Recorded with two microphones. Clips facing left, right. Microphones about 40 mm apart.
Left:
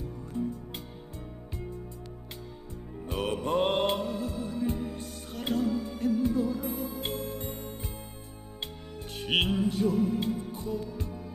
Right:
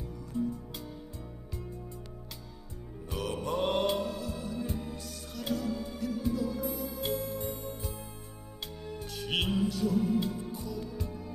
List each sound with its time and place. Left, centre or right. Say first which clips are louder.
3.1 s music: left 4 dB; left
9.3 s music: left 3 dB; left